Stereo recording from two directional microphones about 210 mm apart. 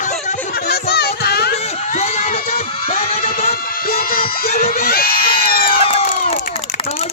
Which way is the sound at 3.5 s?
45° left (ahead or behind).